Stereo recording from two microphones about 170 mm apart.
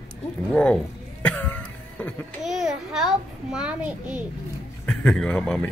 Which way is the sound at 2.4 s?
Centre (ahead or behind).